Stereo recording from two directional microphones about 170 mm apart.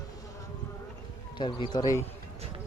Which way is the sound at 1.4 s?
30° left (ahead or behind).